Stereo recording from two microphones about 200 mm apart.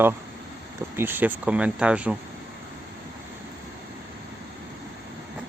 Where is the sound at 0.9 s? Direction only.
10° right (ahead or behind).